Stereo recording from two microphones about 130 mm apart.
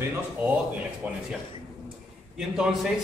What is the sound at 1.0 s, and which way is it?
Speech, 15° right (ahead or behind).